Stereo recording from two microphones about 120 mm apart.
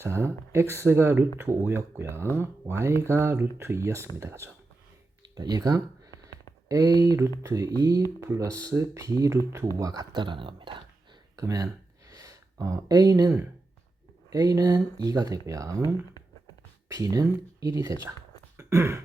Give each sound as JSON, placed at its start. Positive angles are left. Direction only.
{"t": 0.0, "sound": "speech", "side_deg": -20}
{"t": 5.2, "sound": "speech", "side_deg": -35}
{"t": 11.3, "sound": "a sound", "side_deg": -30}
{"t": 14.3, "sound": "speech", "side_deg": -30}
{"t": 18.5, "sound": "throat clearing", "side_deg": -25}